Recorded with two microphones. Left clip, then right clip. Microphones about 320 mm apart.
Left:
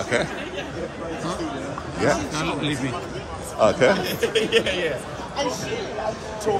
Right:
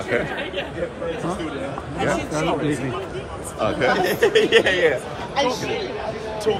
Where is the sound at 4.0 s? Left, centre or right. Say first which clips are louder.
Right 6 dB; right.